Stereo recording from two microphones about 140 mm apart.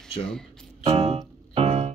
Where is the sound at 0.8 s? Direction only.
45° right (ahead or behind).